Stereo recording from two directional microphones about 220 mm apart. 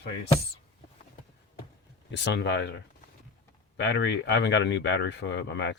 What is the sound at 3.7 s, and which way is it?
Speech, 50° left (ahead or behind).